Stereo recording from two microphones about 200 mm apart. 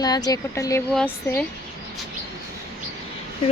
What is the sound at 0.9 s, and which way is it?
Speech, 5° left (ahead or behind).